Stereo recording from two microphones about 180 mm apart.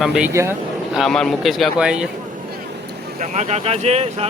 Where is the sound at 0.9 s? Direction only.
5° left (ahead or behind).